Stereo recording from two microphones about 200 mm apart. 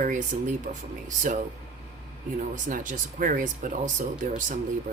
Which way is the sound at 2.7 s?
40° right (ahead or behind).